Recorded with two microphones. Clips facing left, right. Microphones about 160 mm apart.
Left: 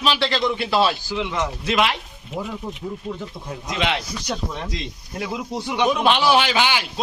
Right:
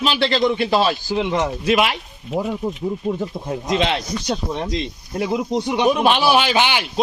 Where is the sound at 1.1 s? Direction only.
45° right (ahead or behind).